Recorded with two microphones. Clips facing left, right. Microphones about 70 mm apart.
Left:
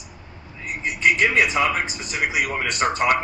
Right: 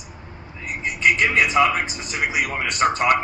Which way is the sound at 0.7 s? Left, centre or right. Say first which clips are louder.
Even; right.